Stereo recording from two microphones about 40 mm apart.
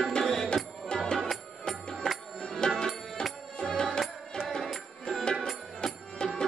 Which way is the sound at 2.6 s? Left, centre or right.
Left.